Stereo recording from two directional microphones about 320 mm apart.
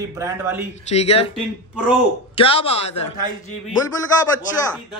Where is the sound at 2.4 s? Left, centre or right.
Centre.